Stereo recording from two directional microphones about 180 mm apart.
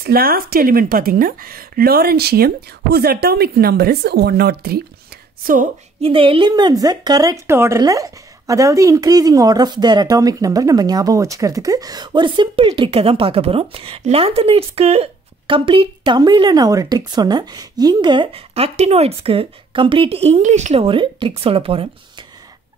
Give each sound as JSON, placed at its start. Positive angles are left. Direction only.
{"t": 0.0, "sound": "a woman's voice", "side_deg": -55}
{"t": 5.4, "sound": "a woman's voice", "side_deg": -50}
{"t": 5.9, "sound": "a woman's voice", "side_deg": -30}